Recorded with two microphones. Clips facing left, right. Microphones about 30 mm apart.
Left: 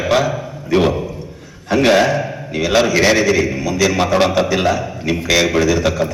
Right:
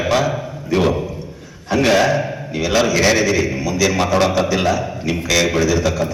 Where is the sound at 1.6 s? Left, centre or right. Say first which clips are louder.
Left 2 dB; centre.